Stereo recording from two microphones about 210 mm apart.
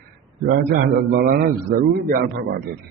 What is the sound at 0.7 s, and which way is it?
A man's voice, 40° right (ahead or behind).